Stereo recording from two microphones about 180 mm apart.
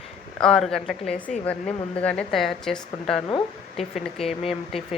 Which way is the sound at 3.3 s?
25° left (ahead or behind).